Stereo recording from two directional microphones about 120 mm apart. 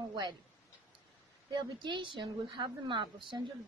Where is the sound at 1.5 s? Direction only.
40° right (ahead or behind).